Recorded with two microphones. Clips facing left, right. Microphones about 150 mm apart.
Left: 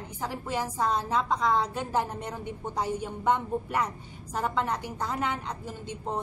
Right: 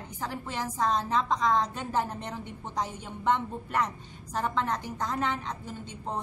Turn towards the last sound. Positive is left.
turn(degrees=10)  # may be behind; listen again after turning